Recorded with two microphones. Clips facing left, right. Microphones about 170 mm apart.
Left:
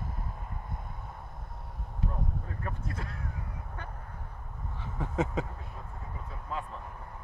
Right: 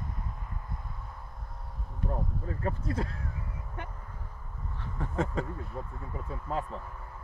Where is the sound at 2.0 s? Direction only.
55° right (ahead or behind).